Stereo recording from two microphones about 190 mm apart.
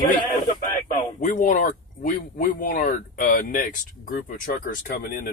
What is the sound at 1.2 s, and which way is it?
Speech, 45° left (ahead or behind).